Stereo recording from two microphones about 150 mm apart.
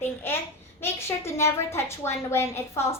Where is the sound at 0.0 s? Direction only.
15° left (ahead or behind).